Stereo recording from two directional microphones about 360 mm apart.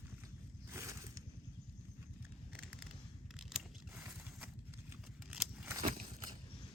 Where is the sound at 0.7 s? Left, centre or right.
Centre.